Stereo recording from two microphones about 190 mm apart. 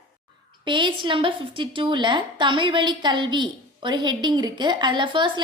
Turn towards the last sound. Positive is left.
turn(degrees=-25)  # may be behind; listen again after turning